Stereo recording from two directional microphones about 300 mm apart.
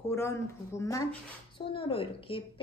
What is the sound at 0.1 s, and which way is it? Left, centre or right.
A woman's voice, centre.